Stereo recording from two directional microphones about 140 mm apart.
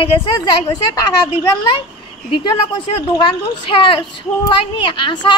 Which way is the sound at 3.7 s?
40° left (ahead or behind).